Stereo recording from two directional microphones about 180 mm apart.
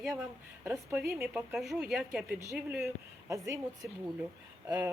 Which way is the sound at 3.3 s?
15° right (ahead or behind).